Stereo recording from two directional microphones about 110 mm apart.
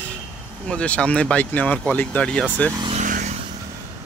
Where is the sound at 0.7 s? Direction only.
10° left (ahead or behind).